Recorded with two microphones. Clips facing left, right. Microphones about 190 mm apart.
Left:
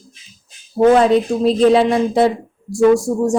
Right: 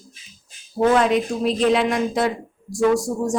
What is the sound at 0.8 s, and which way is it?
A woman's voice, 30° left (ahead or behind).